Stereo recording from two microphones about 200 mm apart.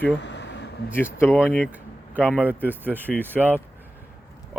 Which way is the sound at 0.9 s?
10° left (ahead or behind).